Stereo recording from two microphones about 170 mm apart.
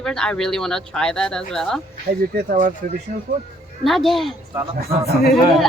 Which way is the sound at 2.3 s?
50° right (ahead or behind).